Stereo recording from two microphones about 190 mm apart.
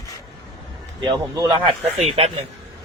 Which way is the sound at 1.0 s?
25° right (ahead or behind).